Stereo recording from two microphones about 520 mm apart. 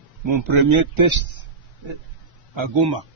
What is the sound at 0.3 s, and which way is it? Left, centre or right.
Speech, right.